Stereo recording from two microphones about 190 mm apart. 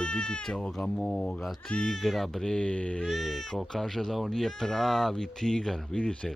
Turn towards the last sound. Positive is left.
turn(degrees=5)  # may be behind; listen again after turning